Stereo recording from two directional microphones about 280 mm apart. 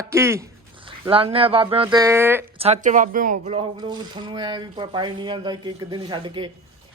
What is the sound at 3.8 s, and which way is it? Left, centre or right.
Speech, centre.